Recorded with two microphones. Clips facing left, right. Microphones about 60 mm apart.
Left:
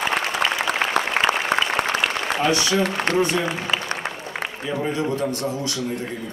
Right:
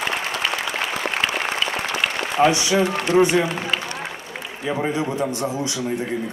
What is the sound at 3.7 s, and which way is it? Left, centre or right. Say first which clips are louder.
Applause: even; centre.